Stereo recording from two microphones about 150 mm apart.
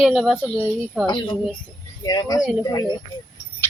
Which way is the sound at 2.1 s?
25° left (ahead or behind).